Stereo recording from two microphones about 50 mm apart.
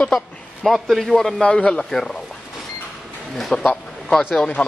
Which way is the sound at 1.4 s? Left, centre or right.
Centre.